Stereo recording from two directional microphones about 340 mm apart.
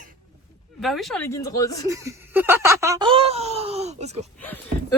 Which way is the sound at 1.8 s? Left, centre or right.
Centre.